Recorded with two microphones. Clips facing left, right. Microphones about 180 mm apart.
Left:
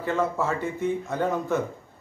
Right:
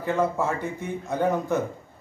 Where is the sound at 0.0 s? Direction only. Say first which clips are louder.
Right 1 dB; 15° right (ahead or behind).